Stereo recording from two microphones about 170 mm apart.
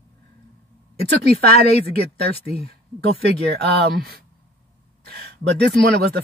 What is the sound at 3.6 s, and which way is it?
Speech, 70° right (ahead or behind).